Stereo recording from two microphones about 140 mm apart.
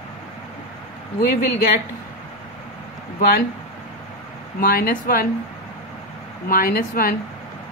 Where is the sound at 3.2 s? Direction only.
90° left.